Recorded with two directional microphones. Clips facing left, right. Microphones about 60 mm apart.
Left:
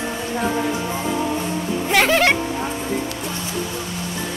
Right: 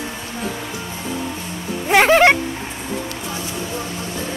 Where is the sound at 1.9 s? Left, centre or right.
Right.